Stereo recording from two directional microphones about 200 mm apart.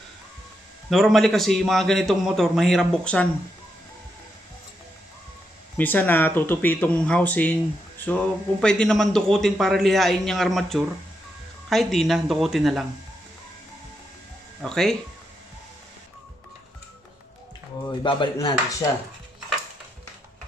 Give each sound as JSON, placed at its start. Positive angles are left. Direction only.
{"t": 0.8, "sound": "a man's voice", "side_deg": 0}
{"t": 5.8, "sound": "a man's voice", "side_deg": 10}
{"t": 14.6, "sound": "a man's voice", "side_deg": 0}
{"t": 18.0, "sound": "speech", "side_deg": 20}